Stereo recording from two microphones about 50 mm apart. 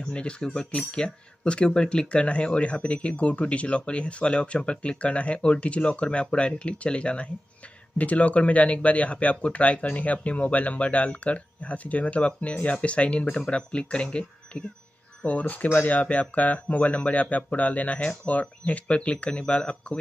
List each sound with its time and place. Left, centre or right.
0.0 s speech: centre
15.2 s speech: left